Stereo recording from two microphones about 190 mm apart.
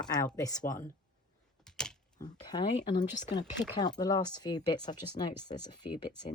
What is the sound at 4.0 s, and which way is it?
Speech, 20° left (ahead or behind).